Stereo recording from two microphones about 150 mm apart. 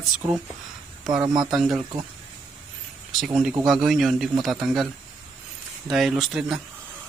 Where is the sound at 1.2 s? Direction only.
30° right (ahead or behind).